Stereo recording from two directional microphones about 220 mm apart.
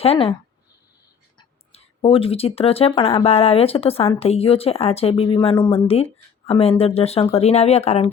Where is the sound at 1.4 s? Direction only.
25° left (ahead or behind).